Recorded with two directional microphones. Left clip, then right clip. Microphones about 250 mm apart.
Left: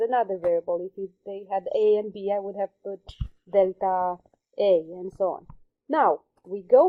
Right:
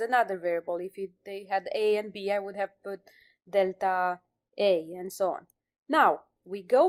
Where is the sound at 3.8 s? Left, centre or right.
Right.